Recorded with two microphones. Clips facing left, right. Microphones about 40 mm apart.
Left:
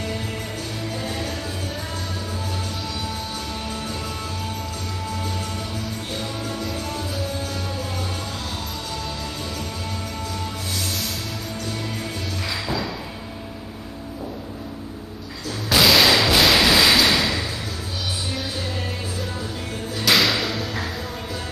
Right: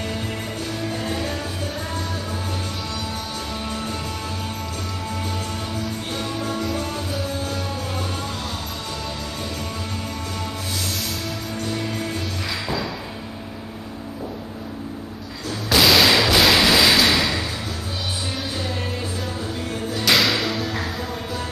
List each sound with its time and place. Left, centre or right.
1.0 s music: right
6.6 s music: centre
15.7 s a sound: centre
20.0 s music: centre